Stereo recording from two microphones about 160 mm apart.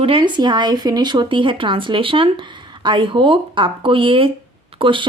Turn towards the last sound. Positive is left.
turn(degrees=-30)  # may be behind; listen again after turning